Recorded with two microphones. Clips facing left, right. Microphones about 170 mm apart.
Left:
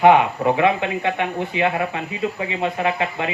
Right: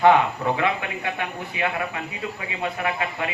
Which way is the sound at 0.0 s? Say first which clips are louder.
Left 3 dB; 20° left (ahead or behind).